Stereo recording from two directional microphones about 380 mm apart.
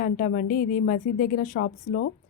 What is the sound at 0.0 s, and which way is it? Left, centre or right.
Speech, left.